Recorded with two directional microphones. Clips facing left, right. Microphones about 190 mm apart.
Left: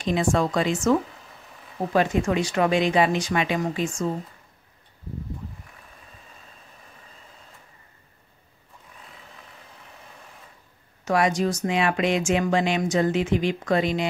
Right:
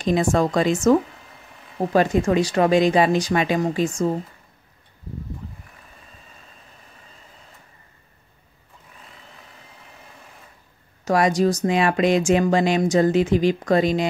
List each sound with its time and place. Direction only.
0.0 s speech: 40° right (ahead or behind)
1.9 s speech: 40° right (ahead or behind)
11.1 s speech: 40° right (ahead or behind)